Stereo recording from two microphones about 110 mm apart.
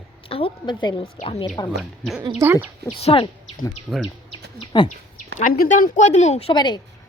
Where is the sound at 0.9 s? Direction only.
70° left (ahead or behind).